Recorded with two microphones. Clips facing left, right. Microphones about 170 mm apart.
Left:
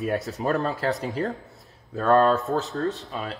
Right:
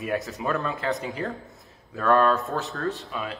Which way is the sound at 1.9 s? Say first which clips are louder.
Left 2 dB; 30° left (ahead or behind).